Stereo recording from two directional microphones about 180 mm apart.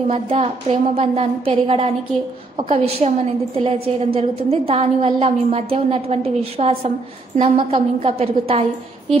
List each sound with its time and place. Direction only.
0.1 s a woman's voice: 35° right (ahead or behind)